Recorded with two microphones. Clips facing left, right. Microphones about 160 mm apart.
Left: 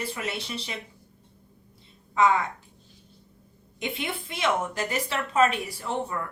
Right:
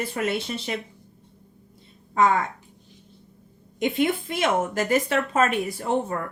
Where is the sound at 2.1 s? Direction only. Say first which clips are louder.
Right 2 dB; 50° right (ahead or behind).